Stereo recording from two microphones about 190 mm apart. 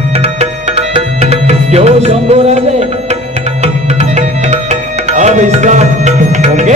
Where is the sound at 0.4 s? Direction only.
35° right (ahead or behind).